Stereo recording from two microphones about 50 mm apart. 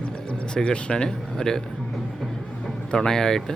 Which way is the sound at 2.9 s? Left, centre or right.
Centre.